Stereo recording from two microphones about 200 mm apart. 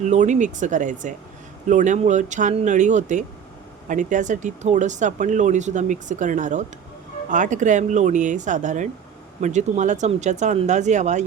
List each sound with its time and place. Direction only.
0.0 s speech: 35° right (ahead or behind)